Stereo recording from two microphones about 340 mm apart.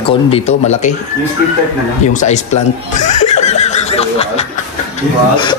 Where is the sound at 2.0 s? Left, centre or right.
Left.